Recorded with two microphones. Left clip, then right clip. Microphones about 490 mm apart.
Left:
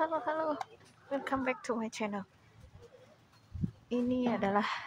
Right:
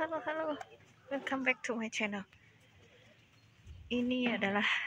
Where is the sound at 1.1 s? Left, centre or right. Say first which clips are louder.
Even; right.